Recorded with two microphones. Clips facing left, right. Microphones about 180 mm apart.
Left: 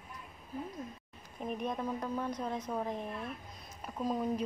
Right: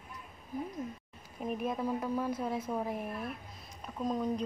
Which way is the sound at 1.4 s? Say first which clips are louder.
Right 2 dB; 5° right (ahead or behind).